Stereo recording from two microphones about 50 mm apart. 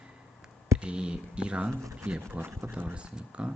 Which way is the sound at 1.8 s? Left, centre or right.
Right.